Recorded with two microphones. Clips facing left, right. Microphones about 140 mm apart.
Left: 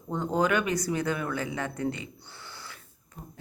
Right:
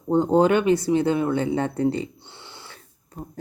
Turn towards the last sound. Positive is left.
turn(degrees=-35)  # may be behind; listen again after turning